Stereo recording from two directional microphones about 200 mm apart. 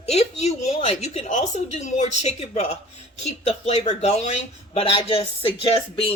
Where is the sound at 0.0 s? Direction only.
30° left (ahead or behind).